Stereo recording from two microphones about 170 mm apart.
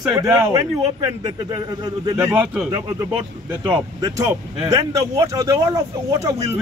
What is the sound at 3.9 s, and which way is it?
Speech, 25° right (ahead or behind).